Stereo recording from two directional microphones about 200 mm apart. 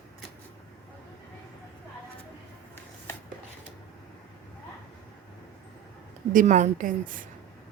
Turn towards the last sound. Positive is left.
turn(degrees=-45)  # may be behind; listen again after turning